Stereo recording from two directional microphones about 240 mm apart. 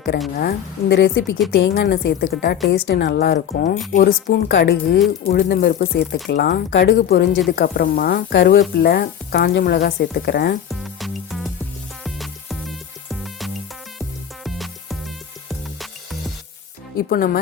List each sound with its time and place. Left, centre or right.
0.3 s a woman's voice: left
10.7 s music: centre
17.0 s a woman's voice: left